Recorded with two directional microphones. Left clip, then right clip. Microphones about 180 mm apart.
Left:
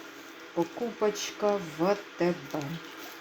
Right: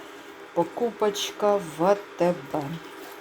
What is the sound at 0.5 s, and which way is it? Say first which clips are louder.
Speech: right 6 dB; 15° right (ahead or behind).